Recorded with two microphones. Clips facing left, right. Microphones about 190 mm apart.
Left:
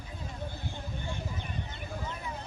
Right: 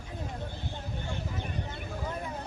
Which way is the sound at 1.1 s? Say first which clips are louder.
Right 3 dB; 55° right (ahead or behind).